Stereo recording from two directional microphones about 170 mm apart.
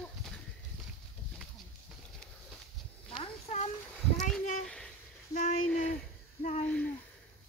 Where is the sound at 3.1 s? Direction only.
35° left (ahead or behind).